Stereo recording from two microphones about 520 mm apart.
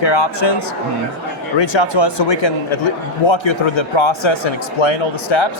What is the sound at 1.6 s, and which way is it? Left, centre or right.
A man's voice, left.